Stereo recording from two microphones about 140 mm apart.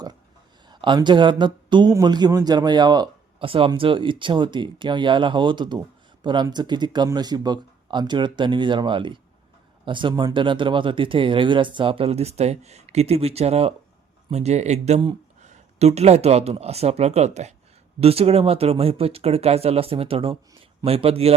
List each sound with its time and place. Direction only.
0.7 s speech: 35° right (ahead or behind)